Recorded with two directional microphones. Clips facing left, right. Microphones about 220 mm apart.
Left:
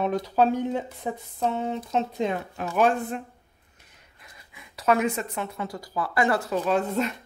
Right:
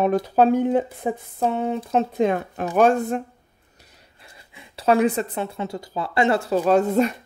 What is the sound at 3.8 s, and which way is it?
A woman's voice, 30° right (ahead or behind).